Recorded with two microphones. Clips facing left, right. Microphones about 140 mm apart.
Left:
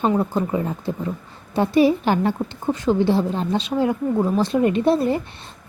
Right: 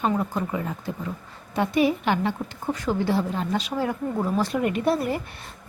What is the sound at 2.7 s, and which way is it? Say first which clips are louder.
A woman's voice: left 6 dB; 25° left (ahead or behind).